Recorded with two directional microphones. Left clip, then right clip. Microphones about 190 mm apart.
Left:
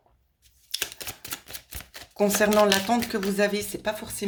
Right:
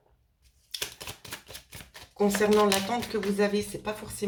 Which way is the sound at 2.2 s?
45° left (ahead or behind).